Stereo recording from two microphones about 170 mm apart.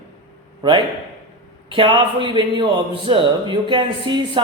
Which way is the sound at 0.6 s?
25° right (ahead or behind).